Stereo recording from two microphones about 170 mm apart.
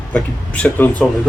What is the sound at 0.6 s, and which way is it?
Speech, 10° left (ahead or behind).